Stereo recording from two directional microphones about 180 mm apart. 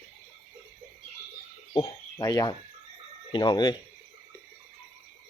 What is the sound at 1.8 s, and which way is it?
Speech, 20° left (ahead or behind).